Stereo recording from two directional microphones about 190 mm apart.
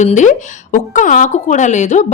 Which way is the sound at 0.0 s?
40° left (ahead or behind).